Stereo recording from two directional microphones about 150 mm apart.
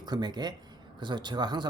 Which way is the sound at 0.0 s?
30° right (ahead or behind).